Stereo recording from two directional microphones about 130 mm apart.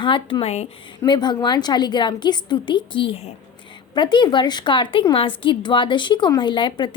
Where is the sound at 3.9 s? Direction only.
35° left (ahead or behind).